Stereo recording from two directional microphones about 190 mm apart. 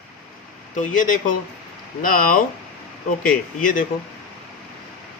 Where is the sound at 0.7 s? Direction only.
40° left (ahead or behind).